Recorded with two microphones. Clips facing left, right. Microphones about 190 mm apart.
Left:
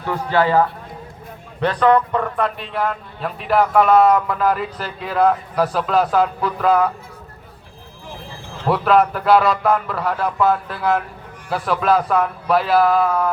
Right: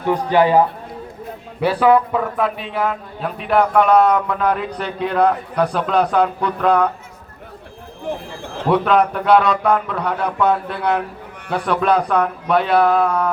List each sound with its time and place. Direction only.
0.0 s a man's voice: 15° right (ahead or behind); by 6.9 s 5° left (ahead or behind)
8.7 s a man's voice: centre (ahead or behind)